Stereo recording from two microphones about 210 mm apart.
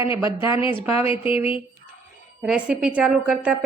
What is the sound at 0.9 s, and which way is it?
Speech, 25° left (ahead or behind).